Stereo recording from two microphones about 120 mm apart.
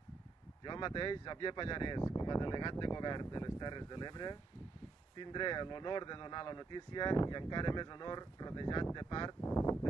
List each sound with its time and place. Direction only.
0.7 s speech: 45° left (ahead or behind)
2.0 s speech: 35° left (ahead or behind)
9.4 s a sound: 25° left (ahead or behind)